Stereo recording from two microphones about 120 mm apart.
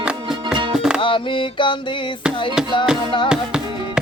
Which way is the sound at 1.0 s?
45° left (ahead or behind).